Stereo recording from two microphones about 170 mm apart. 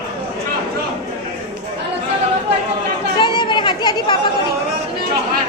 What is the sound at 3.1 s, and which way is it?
Chatter, 25° left (ahead or behind).